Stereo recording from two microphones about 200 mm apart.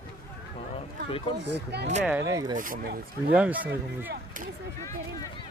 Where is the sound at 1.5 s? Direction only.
55° right (ahead or behind).